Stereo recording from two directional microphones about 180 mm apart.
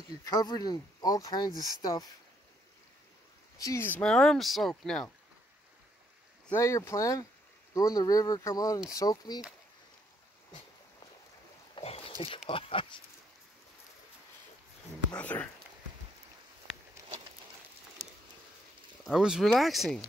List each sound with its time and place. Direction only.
0.2 s speech: 20° left (ahead or behind)
3.5 s speech: 15° left (ahead or behind)
6.5 s speech: 15° left (ahead or behind)
11.7 s boat: 35° left (ahead or behind)
12.4 s speech: 30° left (ahead or behind)
15.1 s speech: 10° left (ahead or behind)
19.0 s speech: 5° right (ahead or behind)